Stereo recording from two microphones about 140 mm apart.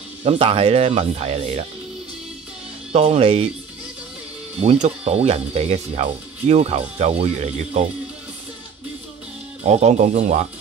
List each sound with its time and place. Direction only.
0.2 s speech: 40° right (ahead or behind)
2.9 s speech: 50° right (ahead or behind)
4.6 s speech: 45° right (ahead or behind)
9.6 s speech: 50° right (ahead or behind)